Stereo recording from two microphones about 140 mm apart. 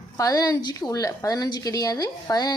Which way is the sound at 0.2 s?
25° left (ahead or behind).